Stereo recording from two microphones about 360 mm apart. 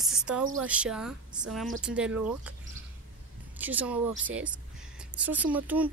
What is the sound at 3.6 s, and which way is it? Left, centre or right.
Speech, centre.